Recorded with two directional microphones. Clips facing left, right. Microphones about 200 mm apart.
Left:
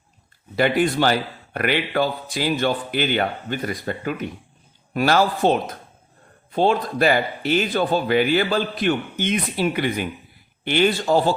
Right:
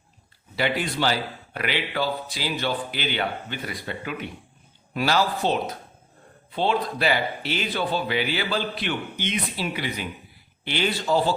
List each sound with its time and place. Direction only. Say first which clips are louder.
0.5 s a man's voice: left 7 dB; 50° left (ahead or behind)